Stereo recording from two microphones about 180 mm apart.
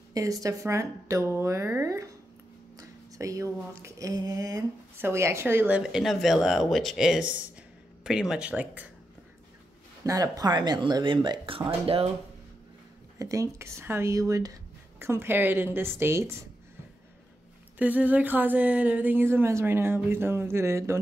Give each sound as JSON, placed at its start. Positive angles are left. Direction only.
{"t": 0.1, "sound": "speech", "side_deg": -20}
{"t": 3.2, "sound": "speech", "side_deg": -15}
{"t": 10.0, "sound": "speech", "side_deg": -20}
{"t": 13.2, "sound": "speech", "side_deg": -20}
{"t": 17.7, "sound": "speech", "side_deg": -10}